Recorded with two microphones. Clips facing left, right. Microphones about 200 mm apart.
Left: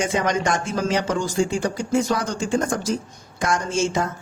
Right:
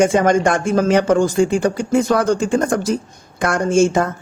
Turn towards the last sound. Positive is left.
turn(degrees=-55)  # may be behind; listen again after turning